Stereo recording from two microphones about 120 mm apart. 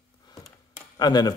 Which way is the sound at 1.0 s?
35° left (ahead or behind).